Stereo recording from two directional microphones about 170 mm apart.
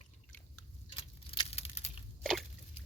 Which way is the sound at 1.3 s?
35° left (ahead or behind).